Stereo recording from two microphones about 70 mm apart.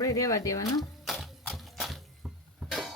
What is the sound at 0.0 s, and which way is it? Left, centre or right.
Speech, left.